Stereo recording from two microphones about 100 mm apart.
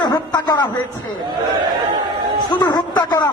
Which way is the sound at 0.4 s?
45° left (ahead or behind).